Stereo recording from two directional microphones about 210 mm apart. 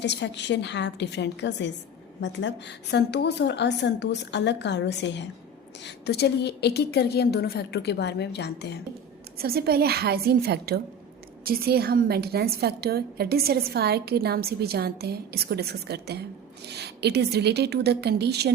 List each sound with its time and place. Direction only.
0.0 s a woman's voice: 55° left (ahead or behind)
9.4 s a woman's voice: 45° right (ahead or behind)